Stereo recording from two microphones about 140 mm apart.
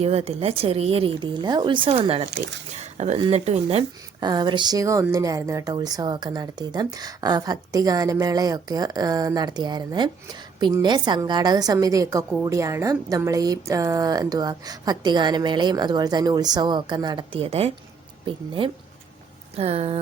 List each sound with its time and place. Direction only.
0.0 s a woman's voice: 50° right (ahead or behind)
2.7 s a sound: 50° right (ahead or behind)
3.2 s a woman's voice: 45° right (ahead or behind)
4.2 s a woman's voice: 30° right (ahead or behind); by 20.0 s 45° right (ahead or behind)